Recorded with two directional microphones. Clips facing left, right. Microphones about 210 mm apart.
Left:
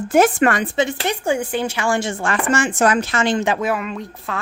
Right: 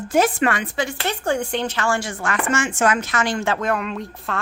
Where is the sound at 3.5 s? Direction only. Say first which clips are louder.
Left 1 dB; 5° left (ahead or behind).